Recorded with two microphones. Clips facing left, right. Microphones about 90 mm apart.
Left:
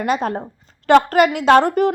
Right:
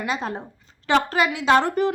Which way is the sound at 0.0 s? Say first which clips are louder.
Left 7 dB; 60° left (ahead or behind).